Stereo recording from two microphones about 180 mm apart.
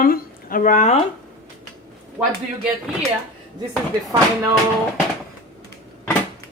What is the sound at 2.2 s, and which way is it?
Speech, 15° right (ahead or behind).